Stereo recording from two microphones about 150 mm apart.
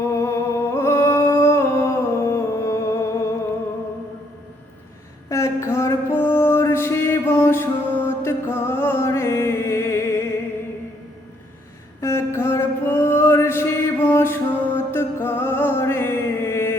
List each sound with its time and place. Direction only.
0.0 s music: 20° left (ahead or behind)
5.3 s music: 20° left (ahead or behind)
11.9 s a sound: 20° left (ahead or behind)